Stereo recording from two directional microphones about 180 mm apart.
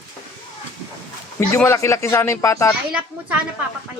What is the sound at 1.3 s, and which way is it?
Speech, 15° left (ahead or behind).